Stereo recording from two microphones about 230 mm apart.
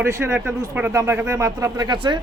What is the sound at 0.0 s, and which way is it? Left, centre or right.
Speech, centre.